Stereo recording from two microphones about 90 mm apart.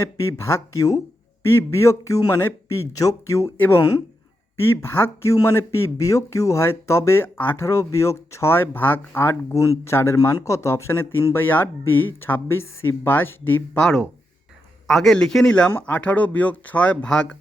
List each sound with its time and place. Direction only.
0.0 s speech: 30° left (ahead or behind)
13.7 s speech: 10° left (ahead or behind)